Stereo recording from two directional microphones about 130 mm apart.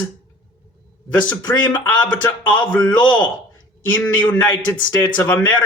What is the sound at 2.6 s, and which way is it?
A man's voice, 15° left (ahead or behind).